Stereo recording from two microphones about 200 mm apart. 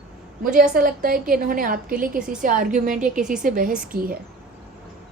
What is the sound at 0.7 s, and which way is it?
A woman's voice, 45° right (ahead or behind).